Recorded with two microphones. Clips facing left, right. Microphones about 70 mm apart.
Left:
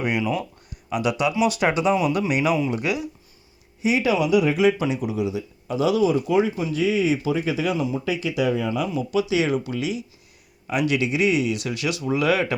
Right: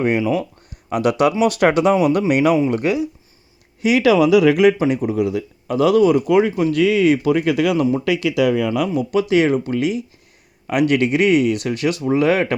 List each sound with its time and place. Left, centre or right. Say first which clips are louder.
0.2 s speech: right 5 dB; right
0.9 s speech: right 6 dB; right
3.8 s speech: right 7 dB; right
4.8 s speech: right 6 dB; right
8.0 s speech: right 6 dB; right
8.9 s speech: right 5 dB; right